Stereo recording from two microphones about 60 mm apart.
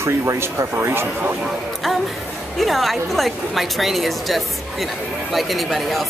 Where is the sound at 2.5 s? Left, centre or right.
Centre.